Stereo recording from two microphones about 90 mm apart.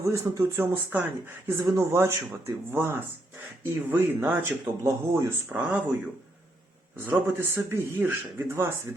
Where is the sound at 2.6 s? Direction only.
25° right (ahead or behind).